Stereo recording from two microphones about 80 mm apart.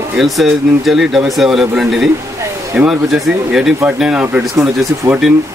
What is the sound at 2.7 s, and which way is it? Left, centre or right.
Speech, centre.